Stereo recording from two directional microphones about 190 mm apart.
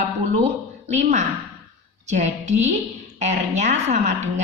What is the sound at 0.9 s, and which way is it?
Speech, 35° right (ahead or behind).